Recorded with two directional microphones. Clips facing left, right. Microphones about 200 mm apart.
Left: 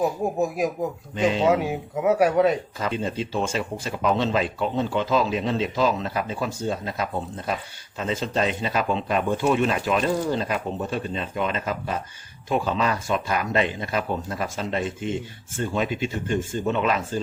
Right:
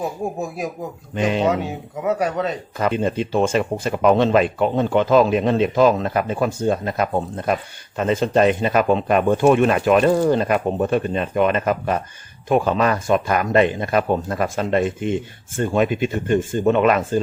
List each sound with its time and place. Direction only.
1.1 s speech: 60° right (ahead or behind)
2.0 s speech: 10° left (ahead or behind)
2.7 s speech: 60° right (ahead or behind)